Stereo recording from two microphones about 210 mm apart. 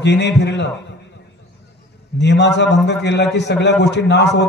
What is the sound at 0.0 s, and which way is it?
Speech, 55° left (ahead or behind).